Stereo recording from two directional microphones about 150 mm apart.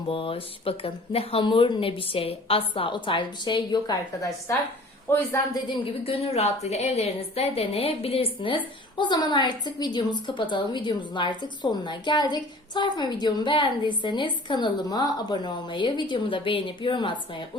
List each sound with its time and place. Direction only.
0.1 s a woman's voice: 35° left (ahead or behind); by 5.4 s 15° left (ahead or behind)
5.8 s a woman's voice: 40° left (ahead or behind)